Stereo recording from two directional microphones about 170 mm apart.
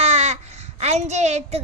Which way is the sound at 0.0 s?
40° right (ahead or behind).